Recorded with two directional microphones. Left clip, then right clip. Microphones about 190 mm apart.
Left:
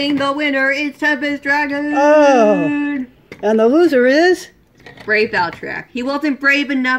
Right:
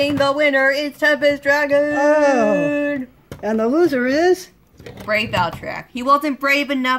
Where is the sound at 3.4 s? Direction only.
Centre (ahead or behind).